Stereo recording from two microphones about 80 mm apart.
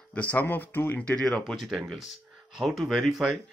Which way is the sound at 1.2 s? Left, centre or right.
Centre.